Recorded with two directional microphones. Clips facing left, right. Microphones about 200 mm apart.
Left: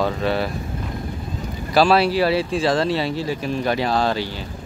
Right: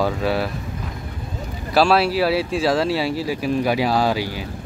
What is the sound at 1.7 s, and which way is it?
Speech, 5° right (ahead or behind).